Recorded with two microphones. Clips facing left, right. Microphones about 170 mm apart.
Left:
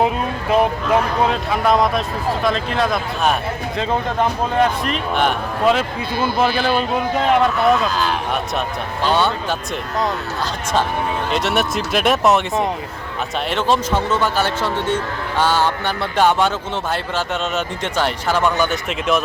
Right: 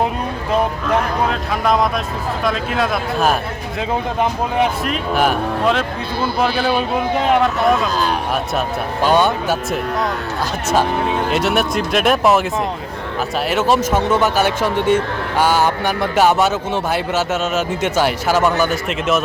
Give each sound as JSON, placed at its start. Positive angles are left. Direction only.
{"t": 0.9, "sound": "speech", "side_deg": 0}
{"t": 9.0, "sound": "speech", "side_deg": -10}
{"t": 11.3, "sound": "speech", "side_deg": 0}